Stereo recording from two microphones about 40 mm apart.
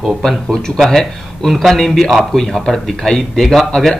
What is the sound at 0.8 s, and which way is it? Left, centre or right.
Speech, centre.